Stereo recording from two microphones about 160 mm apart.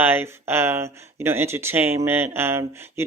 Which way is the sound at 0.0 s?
15° right (ahead or behind).